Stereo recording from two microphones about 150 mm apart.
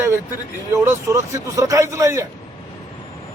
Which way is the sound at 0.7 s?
20° right (ahead or behind).